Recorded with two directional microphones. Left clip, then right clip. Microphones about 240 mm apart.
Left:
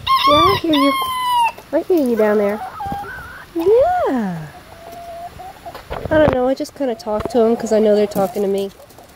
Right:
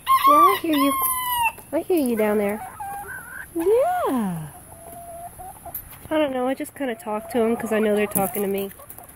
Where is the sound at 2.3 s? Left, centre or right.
Right.